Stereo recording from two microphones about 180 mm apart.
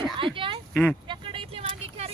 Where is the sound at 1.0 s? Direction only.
30° right (ahead or behind).